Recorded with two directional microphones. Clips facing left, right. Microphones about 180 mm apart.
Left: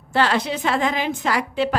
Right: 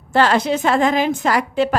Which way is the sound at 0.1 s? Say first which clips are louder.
Right 5 dB; 45° right (ahead or behind).